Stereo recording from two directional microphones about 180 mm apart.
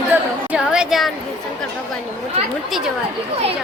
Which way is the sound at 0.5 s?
5° right (ahead or behind).